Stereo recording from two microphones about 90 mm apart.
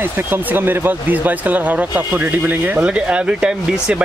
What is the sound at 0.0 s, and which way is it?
Speech, 20° right (ahead or behind).